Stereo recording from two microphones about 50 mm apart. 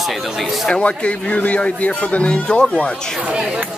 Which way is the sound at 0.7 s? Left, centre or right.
Left.